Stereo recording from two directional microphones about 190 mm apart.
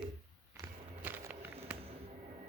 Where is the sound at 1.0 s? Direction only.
10° right (ahead or behind).